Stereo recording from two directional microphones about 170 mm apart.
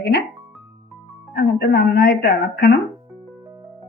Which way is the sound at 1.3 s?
65° left (ahead or behind).